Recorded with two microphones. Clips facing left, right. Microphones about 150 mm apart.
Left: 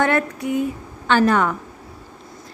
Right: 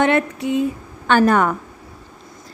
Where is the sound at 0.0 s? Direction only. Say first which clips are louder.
Right 2 dB; 20° right (ahead or behind).